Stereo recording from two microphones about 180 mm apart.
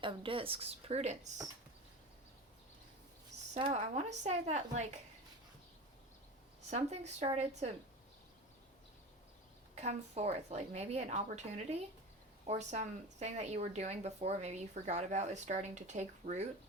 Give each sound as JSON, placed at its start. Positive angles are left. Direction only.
{"t": 0.0, "sound": "speech", "side_deg": -30}
{"t": 3.5, "sound": "speech", "side_deg": -35}
{"t": 6.7, "sound": "speech", "side_deg": -40}
{"t": 9.7, "sound": "speech", "side_deg": -35}